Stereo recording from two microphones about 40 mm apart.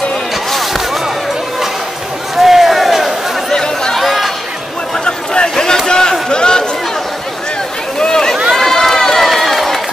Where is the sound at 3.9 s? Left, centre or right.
Centre.